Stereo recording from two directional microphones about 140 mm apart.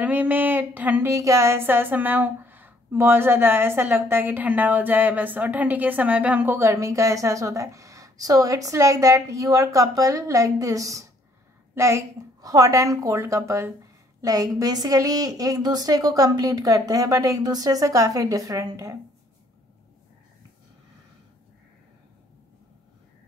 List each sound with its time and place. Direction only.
0.0 s a woman's voice: 10° right (ahead or behind)